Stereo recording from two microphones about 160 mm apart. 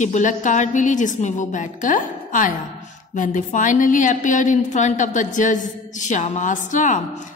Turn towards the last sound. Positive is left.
turn(degrees=50)  # may be behind; listen again after turning